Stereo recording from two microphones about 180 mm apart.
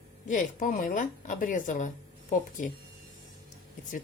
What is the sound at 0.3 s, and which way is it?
A woman's voice, 45° left (ahead or behind).